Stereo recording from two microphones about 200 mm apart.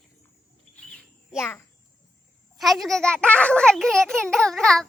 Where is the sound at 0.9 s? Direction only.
Centre (ahead or behind).